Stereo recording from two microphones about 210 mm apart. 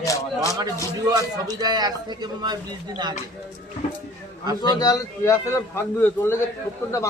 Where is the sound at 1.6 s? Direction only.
20° right (ahead or behind).